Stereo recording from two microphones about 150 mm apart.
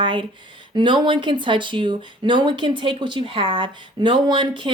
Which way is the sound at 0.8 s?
30° right (ahead or behind).